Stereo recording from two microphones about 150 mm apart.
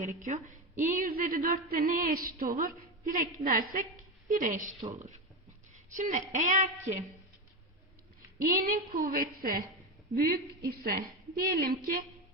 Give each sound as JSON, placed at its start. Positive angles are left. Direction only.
{"t": 0.0, "sound": "a woman's voice", "side_deg": -60}
{"t": 5.9, "sound": "a woman's voice", "side_deg": -55}
{"t": 8.4, "sound": "a woman's voice", "side_deg": -65}
{"t": 10.7, "sound": "a woman's voice", "side_deg": -90}